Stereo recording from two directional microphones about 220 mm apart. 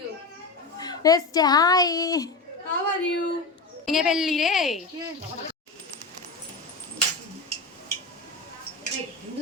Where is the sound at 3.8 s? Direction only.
Centre (ahead or behind).